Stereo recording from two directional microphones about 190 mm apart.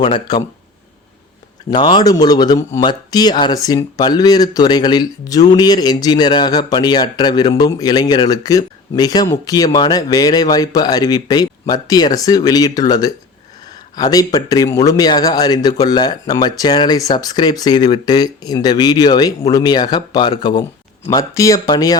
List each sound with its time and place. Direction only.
0.0 s speech: 25° left (ahead or behind)
1.7 s speech: 25° left (ahead or behind)